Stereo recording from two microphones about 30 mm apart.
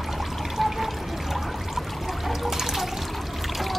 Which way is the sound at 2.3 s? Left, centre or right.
Centre.